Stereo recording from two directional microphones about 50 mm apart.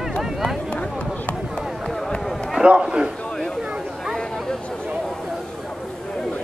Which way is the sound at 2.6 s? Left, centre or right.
Centre.